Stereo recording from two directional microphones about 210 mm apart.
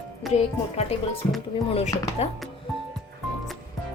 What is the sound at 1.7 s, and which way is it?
Speech, 30° left (ahead or behind).